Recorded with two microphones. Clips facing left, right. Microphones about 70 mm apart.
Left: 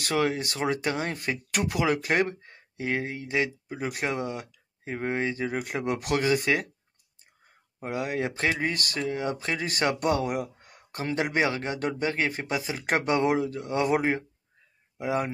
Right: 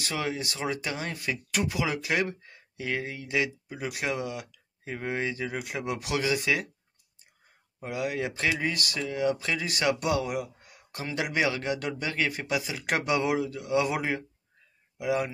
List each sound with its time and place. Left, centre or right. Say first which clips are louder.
0.0 s speech: left 5 dB; left
7.8 s speech: left 1 dB; left